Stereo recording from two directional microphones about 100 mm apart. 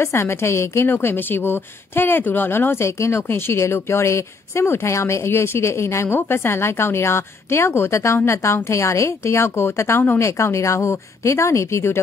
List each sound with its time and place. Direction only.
0.0 s a woman's voice: 25° left (ahead or behind)